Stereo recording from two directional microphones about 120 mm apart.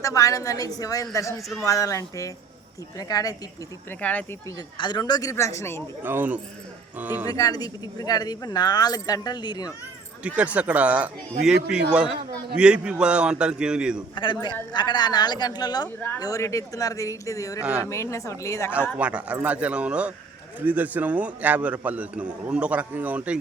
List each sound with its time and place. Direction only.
0.0 s a woman's voice: 30° left (ahead or behind)
3.8 s speech: 10° left (ahead or behind)
4.4 s speech: 35° left (ahead or behind)
5.3 s a woman's voice: 25° left (ahead or behind)
6.0 s a man's voice: 15° right (ahead or behind)
7.3 s speech: 30° left (ahead or behind)
10.2 s a man's voice: 10° right (ahead or behind)
14.4 s a woman's voice: 40° left (ahead or behind)
17.6 s a man's voice: 10° right (ahead or behind)
17.8 s a woman's voice: 25° left (ahead or behind)
18.9 s a man's voice: 10° right (ahead or behind)